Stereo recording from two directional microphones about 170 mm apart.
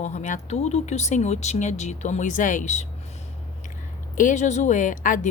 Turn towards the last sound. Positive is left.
turn(degrees=50)  # may be behind; listen again after turning